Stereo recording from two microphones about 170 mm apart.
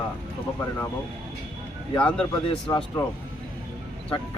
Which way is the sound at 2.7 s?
20° left (ahead or behind).